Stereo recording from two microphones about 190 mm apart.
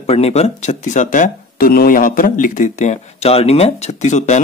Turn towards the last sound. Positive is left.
turn(degrees=40)  # may be behind; listen again after turning